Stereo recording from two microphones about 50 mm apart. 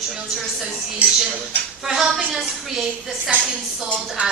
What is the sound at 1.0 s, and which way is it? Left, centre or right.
Dishes, right.